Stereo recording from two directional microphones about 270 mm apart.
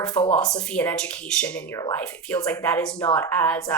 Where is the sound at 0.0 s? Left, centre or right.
Centre.